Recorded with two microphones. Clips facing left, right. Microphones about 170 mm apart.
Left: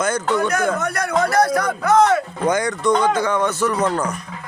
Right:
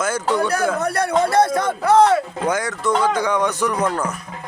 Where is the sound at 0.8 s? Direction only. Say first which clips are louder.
Right 2 dB; 30° right (ahead or behind).